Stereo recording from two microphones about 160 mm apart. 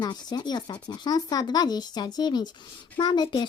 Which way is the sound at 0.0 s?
25° left (ahead or behind).